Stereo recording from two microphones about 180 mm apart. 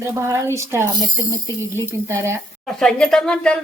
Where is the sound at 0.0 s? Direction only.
15° right (ahead or behind).